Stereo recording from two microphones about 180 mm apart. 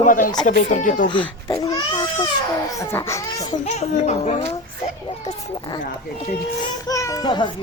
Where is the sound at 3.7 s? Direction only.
40° left (ahead or behind).